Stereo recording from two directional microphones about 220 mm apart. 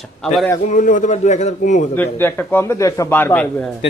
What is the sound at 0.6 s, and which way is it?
A man's voice, 35° left (ahead or behind).